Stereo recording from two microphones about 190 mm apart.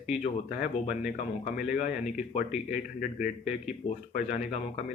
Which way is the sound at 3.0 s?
45° left (ahead or behind).